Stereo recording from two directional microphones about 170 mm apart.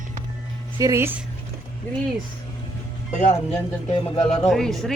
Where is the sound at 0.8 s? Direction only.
15° right (ahead or behind).